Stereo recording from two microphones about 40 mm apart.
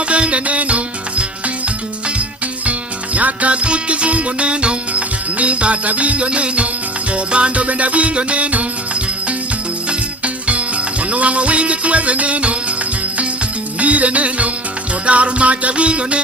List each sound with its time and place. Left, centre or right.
0.1 s music: right
3.2 s music: right
10.2 s music: right
13.7 s music: right